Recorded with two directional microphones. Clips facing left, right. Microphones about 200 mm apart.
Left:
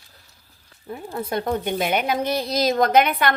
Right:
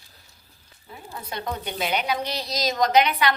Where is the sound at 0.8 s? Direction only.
50° left (ahead or behind).